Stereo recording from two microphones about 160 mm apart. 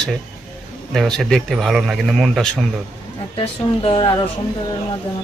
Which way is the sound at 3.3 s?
35° left (ahead or behind).